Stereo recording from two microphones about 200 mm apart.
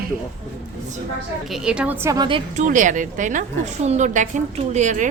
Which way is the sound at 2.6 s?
40° right (ahead or behind).